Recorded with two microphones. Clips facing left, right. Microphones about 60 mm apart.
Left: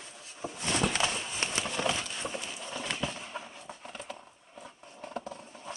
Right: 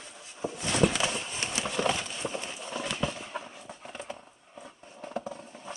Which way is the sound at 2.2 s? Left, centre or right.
Centre.